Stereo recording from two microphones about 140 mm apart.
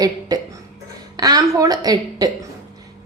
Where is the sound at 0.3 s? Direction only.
25° right (ahead or behind).